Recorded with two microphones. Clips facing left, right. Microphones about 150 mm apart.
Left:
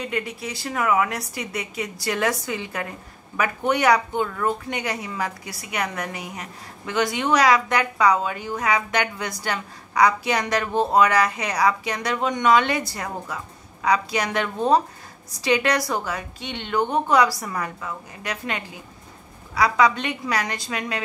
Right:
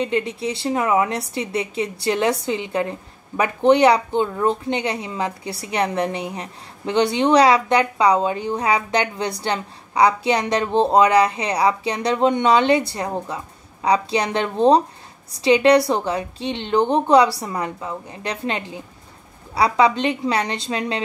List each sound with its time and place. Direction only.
0.0 s a woman's voice: 25° right (ahead or behind)